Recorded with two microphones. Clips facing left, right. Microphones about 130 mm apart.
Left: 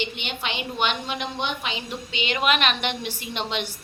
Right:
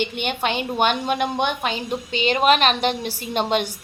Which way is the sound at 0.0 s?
50° right (ahead or behind).